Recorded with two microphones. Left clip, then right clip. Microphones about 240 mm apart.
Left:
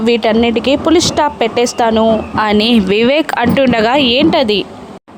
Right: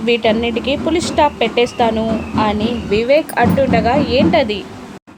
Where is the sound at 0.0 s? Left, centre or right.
Left.